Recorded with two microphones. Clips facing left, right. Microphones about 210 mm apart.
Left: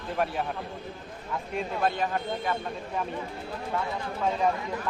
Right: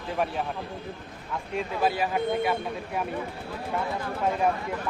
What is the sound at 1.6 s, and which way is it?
Speech, 5° right (ahead or behind).